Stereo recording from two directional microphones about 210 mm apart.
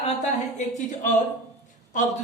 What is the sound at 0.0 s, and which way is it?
Speech, 35° left (ahead or behind).